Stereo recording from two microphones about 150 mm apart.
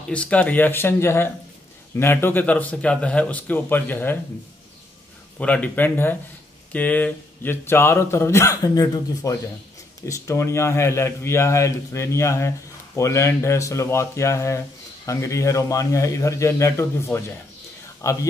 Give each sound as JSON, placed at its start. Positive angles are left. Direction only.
{"t": 0.1, "sound": "speech", "side_deg": 10}
{"t": 5.4, "sound": "speech", "side_deg": 10}